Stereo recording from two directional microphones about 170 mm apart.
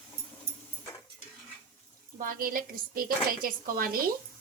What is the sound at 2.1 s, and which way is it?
A woman's voice, 55° right (ahead or behind).